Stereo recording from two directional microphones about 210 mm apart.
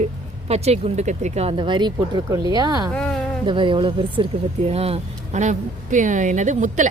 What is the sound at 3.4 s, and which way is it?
Speech, 25° right (ahead or behind).